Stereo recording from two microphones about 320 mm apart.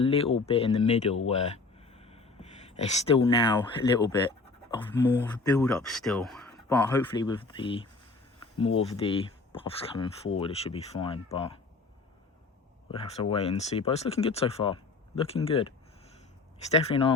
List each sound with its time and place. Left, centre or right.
0.0 s speech: centre
1.5 s a sound: centre
4.8 s speech: centre
13.3 s speech: centre